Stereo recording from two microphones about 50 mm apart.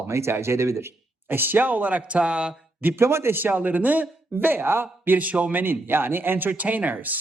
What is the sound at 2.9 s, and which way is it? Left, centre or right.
A man's voice, right.